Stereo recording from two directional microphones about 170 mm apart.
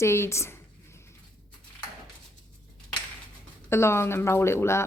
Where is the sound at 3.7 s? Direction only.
15° left (ahead or behind).